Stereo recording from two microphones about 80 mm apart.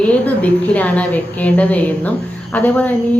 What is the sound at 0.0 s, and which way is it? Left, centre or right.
A woman's voice, centre.